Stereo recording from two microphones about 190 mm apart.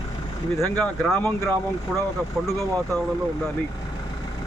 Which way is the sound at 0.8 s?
5° left (ahead or behind).